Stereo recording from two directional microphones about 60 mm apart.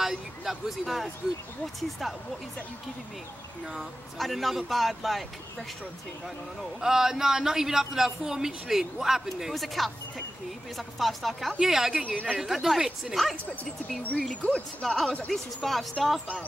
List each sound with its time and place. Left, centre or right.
0.0 s speech: centre
3.7 s speech: centre
6.8 s speech: centre
12.0 s a woman's voice: right
12.4 s speech: centre
14.3 s speech: centre